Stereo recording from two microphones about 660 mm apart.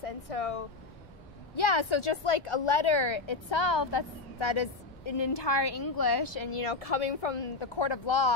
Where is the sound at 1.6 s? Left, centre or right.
Left.